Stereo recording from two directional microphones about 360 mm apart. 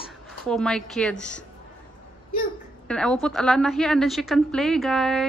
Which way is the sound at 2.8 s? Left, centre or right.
Centre.